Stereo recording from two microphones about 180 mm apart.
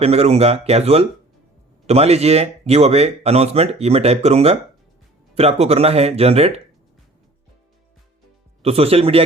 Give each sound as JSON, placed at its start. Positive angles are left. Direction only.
{"t": 0.0, "sound": "speech", "side_deg": -35}
{"t": 8.6, "sound": "speech", "side_deg": -35}